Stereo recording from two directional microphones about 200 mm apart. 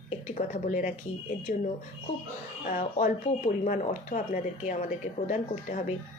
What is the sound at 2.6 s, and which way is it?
Speech, 45° left (ahead or behind).